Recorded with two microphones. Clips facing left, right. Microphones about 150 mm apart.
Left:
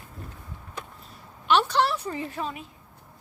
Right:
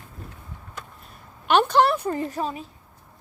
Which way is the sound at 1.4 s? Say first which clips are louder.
Right 4 dB; 50° right (ahead or behind).